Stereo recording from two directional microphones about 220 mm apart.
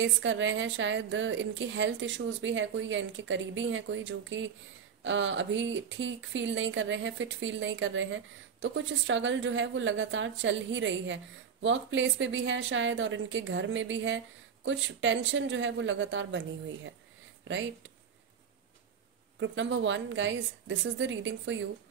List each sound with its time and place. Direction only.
0.0 s speech: 55° right (ahead or behind)
19.4 s speech: 55° right (ahead or behind)